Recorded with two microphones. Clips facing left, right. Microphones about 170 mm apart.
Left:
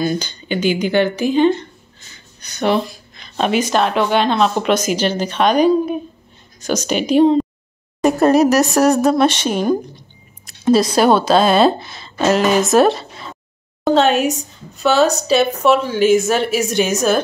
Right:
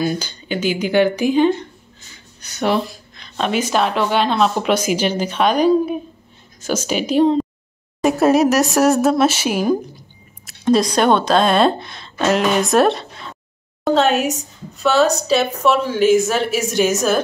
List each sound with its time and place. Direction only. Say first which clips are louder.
0.0 s speech: left 1 dB; 5° right (ahead or behind)
2.4 s a sound: left 1 dB; 5° right (ahead or behind)
3.5 s a woman's voice: left 2 dB; 5° right (ahead or behind)